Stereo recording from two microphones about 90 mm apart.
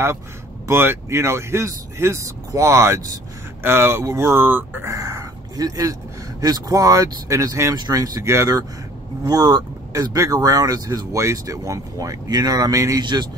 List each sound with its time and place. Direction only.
0.7 s speech: 25° right (ahead or behind)
4.8 s speech: 35° right (ahead or behind)
13.0 s speech: 55° right (ahead or behind)